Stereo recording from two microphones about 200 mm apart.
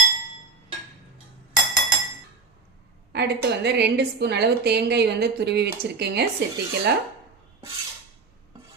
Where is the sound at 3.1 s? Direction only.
55° right (ahead or behind).